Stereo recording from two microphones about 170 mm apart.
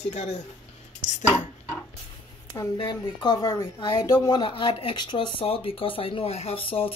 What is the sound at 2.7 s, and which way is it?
Speech, 25° left (ahead or behind).